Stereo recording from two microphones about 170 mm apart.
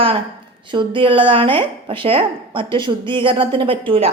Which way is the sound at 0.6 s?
30° right (ahead or behind).